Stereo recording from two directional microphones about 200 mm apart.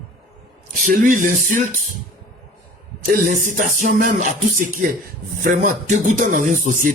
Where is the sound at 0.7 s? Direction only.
40° right (ahead or behind).